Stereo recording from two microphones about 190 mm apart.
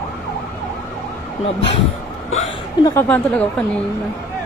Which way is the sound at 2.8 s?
15° left (ahead or behind).